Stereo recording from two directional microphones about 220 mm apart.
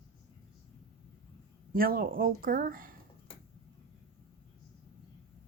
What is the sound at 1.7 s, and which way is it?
Speech, 40° right (ahead or behind).